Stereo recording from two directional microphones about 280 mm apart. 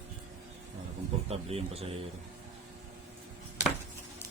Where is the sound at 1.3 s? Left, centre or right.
Right.